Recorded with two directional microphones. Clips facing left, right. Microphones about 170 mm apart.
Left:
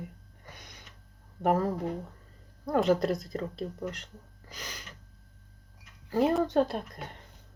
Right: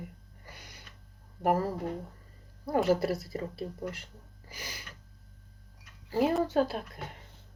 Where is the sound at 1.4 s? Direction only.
10° right (ahead or behind).